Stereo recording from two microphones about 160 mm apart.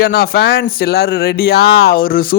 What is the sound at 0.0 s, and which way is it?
A man's voice, 80° left.